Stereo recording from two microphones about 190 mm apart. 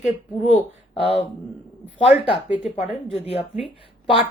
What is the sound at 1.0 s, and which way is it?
Speech, 30° left (ahead or behind).